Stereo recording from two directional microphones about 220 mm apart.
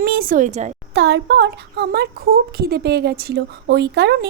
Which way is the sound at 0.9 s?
55° right (ahead or behind).